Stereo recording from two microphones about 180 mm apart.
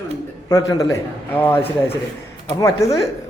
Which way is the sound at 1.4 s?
10° left (ahead or behind).